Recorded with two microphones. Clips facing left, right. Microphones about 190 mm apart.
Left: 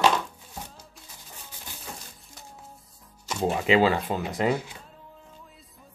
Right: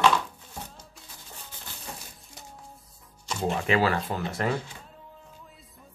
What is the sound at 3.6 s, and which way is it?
Speech, 20° left (ahead or behind).